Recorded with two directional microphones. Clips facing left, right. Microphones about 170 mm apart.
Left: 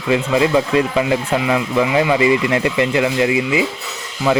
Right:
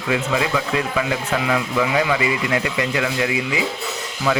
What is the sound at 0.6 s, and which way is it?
A man's voice, 30° left (ahead or behind).